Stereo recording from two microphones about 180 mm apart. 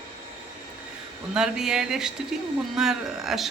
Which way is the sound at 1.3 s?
5° right (ahead or behind).